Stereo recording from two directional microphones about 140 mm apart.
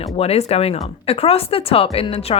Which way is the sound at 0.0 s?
50° left (ahead or behind).